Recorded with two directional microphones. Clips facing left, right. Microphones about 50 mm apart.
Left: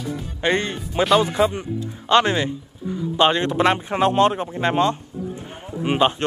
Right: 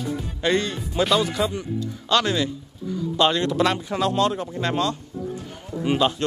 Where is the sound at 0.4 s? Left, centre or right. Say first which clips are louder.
Left 1 dB; left.